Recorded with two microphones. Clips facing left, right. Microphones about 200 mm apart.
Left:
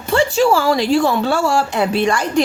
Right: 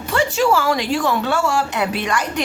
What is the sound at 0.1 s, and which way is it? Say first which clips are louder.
A woman's voice: left 3 dB; 30° left (ahead or behind).